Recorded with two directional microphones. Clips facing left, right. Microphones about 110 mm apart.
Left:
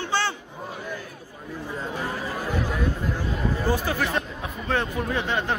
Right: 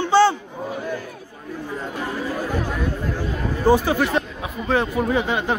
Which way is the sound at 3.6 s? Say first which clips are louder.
Right 10 dB; 20° right (ahead or behind).